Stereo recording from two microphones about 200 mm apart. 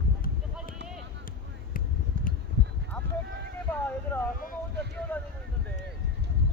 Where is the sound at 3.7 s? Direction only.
10° left (ahead or behind).